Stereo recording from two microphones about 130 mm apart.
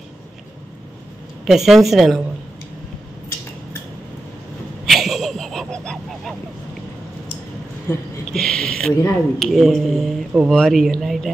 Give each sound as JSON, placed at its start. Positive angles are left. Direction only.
{"t": 1.4, "sound": "a woman's voice", "side_deg": 0}
{"t": 4.8, "sound": "honk", "side_deg": 0}
{"t": 7.9, "sound": "speech", "side_deg": 20}
{"t": 8.3, "sound": "speech", "side_deg": 5}